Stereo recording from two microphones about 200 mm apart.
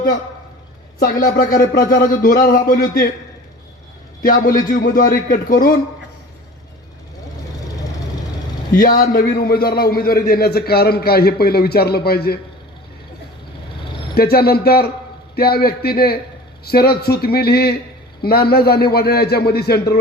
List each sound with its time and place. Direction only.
0.9 s a man's voice: 45° left (ahead or behind)
4.2 s a man's voice: 45° left (ahead or behind)
8.7 s a man's voice: 45° left (ahead or behind)
14.2 s a man's voice: 50° left (ahead or behind)